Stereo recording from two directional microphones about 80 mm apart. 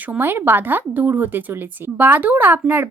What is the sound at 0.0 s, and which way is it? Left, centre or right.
A woman's voice, right.